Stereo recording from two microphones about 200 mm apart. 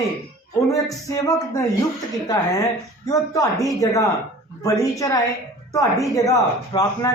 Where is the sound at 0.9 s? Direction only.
15° left (ahead or behind).